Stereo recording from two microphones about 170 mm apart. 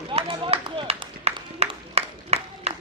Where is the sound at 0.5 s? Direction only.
30° right (ahead or behind).